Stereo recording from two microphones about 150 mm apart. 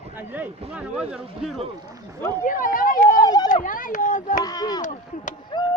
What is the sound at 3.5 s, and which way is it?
Speech, 60° left (ahead or behind).